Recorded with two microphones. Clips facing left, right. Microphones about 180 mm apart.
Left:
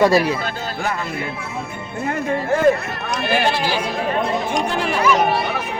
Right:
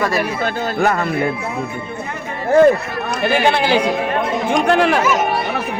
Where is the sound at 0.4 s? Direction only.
60° right (ahead or behind).